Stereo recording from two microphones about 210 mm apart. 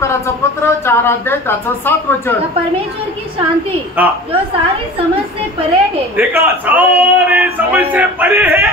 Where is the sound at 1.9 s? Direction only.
10° left (ahead or behind).